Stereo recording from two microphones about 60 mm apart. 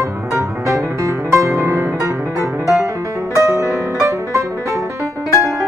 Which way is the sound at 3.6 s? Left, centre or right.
Left.